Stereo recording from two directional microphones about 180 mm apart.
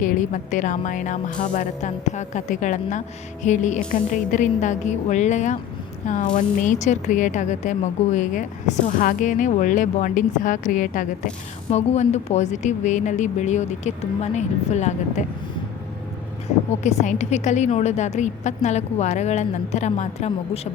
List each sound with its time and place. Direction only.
0.0 s a woman's voice: 45° left (ahead or behind)
16.8 s a woman's voice: 40° left (ahead or behind)